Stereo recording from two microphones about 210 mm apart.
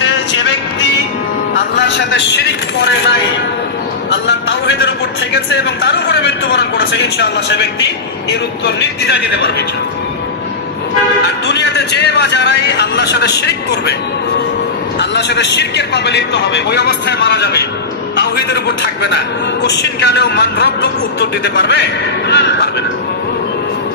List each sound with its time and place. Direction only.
0.0 s music: 55° left (ahead or behind)
1.7 s a man's voice: 55° left (ahead or behind)
4.1 s a man's voice: 55° left (ahead or behind)
11.4 s speech: 50° left (ahead or behind)
14.9 s a man's voice: 55° left (ahead or behind)
18.2 s a sound: 55° left (ahead or behind)
19.6 s speech: 55° left (ahead or behind)